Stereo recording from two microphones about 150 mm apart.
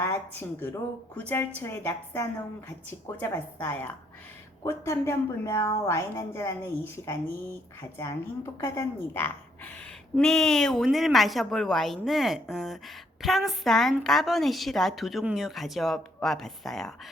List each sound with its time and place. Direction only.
0.0 s a woman's voice: 15° left (ahead or behind)